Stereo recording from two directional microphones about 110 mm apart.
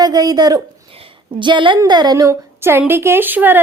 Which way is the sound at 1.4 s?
45° right (ahead or behind).